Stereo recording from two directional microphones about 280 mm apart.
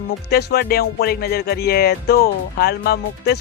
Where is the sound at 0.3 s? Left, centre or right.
Left.